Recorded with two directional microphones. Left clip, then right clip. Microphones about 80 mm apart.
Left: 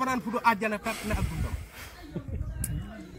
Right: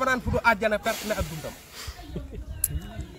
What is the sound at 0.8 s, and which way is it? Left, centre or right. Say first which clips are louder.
Speech: right 5 dB; right.